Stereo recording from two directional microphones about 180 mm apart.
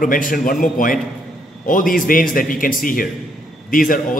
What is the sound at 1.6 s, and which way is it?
A man's voice, 50° left (ahead or behind).